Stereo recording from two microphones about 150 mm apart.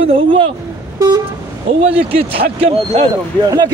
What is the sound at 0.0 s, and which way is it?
Speech, 40° right (ahead or behind).